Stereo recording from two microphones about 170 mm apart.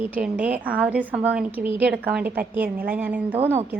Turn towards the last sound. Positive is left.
turn(degrees=-10)  # may be behind; listen again after turning